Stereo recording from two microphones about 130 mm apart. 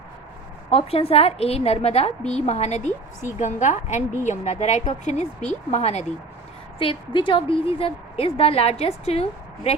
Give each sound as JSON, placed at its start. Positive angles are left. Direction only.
{"t": 0.7, "sound": "a woman's voice", "side_deg": 50}
{"t": 6.7, "sound": "a woman's voice", "side_deg": 40}